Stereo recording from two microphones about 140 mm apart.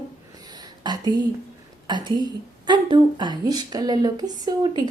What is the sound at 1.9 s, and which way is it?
A woman's voice, 30° right (ahead or behind).